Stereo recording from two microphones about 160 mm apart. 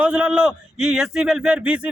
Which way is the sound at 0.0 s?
5° right (ahead or behind).